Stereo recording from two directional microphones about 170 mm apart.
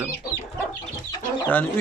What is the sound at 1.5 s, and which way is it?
Speech, 10° left (ahead or behind).